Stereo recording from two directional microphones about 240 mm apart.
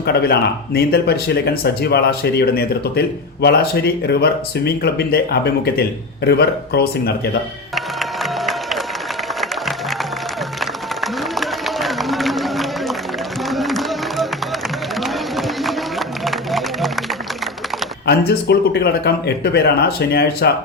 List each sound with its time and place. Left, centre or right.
0.0 s speech: left
7.8 s music: centre
13.5 s a sound: centre
18.0 s speech: left